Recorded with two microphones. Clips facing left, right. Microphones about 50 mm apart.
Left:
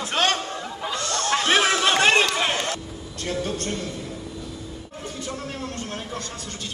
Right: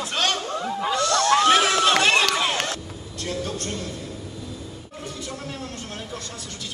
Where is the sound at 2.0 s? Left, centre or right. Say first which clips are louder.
Left 1 dB; left.